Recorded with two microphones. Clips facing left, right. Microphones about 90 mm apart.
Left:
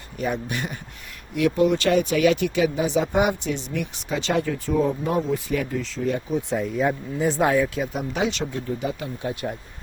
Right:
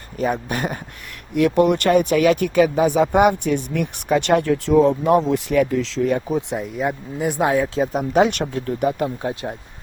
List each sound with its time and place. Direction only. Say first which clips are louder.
0.2 s speech: right 5 dB; 45° right (ahead or behind)
1.4 s speech: right 4 dB; 60° right (ahead or behind)
6.5 s speech: left 1 dB; 10° right (ahead or behind)
7.8 s speech: right 8 dB; 45° right (ahead or behind)
9.2 s speech: right 2 dB; 30° right (ahead or behind)